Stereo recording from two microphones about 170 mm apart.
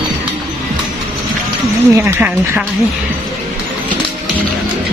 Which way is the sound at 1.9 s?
15° right (ahead or behind).